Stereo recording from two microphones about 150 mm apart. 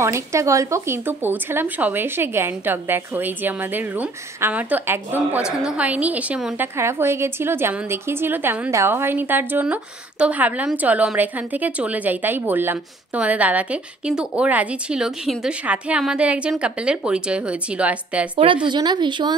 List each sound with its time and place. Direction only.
0.0 s a woman's voice: 20° right (ahead or behind)
18.3 s speech: 35° right (ahead or behind)